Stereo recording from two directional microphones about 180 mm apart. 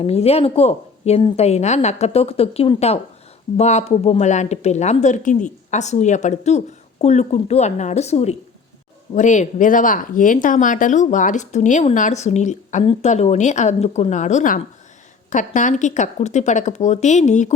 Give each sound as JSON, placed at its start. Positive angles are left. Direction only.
{"t": 0.0, "sound": "speech", "side_deg": 35}